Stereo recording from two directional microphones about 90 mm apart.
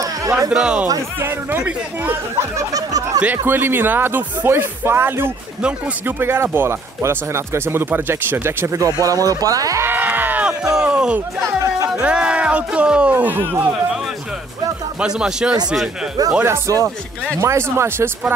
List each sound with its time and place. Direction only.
0.0 s a sound: 40° right (ahead or behind)
0.5 s speech: 10° right (ahead or behind)
1.2 s speech: 25° right (ahead or behind)
2.5 s a sound: 40° right (ahead or behind)
3.2 s speech: 20° right (ahead or behind); by 9.8 s 40° right (ahead or behind)
9.8 s a sound: 20° right (ahead or behind)
10.6 s speech: 5° right (ahead or behind)
11.4 s chatter: 35° right (ahead or behind)
12.0 s speech: 10° right (ahead or behind)
15.0 s speech: 10° right (ahead or behind)
16.4 s a sound: 35° right (ahead or behind)
17.4 s speech: 30° right (ahead or behind)